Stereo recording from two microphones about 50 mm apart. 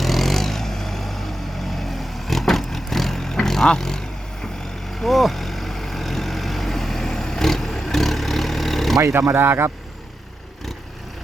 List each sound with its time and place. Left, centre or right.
0.0 s vehicle: centre
9.3 s speech: right